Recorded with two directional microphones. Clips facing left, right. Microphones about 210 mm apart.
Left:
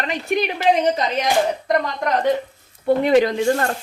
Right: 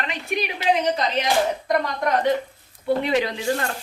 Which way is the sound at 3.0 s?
50° left (ahead or behind).